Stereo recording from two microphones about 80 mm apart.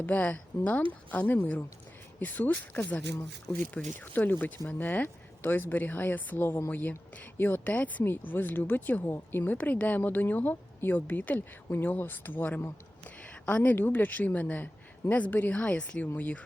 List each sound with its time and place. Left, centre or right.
0.0 s a woman's voice: centre